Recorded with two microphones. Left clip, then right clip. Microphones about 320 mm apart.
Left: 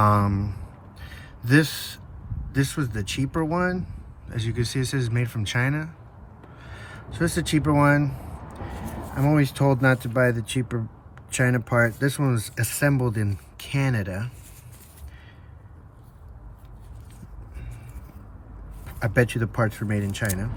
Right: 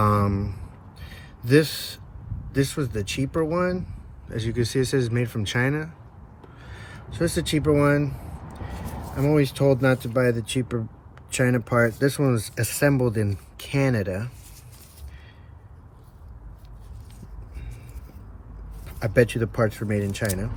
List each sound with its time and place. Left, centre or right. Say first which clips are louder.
0.0 s a sound: left 1 dB; centre
2.5 s speech: right 2 dB; centre
18.9 s speech: right 3 dB; centre